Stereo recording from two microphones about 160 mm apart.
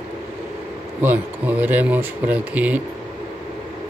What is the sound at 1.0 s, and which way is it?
Speech, 10° right (ahead or behind).